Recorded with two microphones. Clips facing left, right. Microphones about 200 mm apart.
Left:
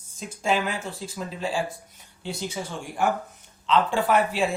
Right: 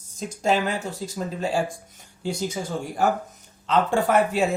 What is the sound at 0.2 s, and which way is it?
Speech, 40° right (ahead or behind).